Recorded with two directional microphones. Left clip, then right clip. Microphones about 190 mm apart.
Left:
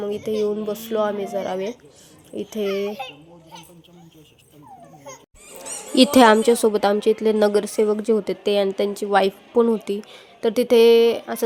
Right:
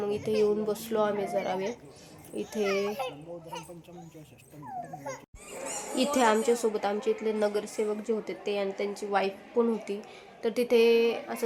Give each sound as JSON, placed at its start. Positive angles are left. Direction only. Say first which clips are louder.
{"t": 0.0, "sound": "speech", "louder": "left 4 dB", "side_deg": 25}
{"t": 5.9, "sound": "a woman's voice", "louder": "left 12 dB", "side_deg": 45}